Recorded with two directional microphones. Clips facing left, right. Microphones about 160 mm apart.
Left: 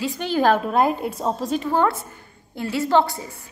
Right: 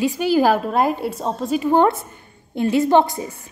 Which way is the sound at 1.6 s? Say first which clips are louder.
Right 6 dB; 20° right (ahead or behind).